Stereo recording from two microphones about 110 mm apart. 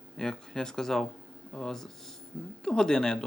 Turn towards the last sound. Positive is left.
turn(degrees=5)  # may be behind; listen again after turning